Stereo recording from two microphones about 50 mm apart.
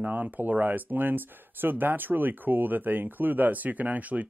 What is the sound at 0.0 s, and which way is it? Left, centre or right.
Speech, right.